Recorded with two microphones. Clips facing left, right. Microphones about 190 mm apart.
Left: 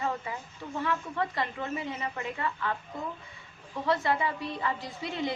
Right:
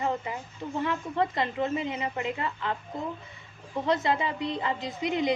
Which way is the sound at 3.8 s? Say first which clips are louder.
Right 1 dB; 20° right (ahead or behind).